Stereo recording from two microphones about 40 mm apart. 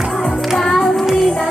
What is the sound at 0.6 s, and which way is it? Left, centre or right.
Music, centre.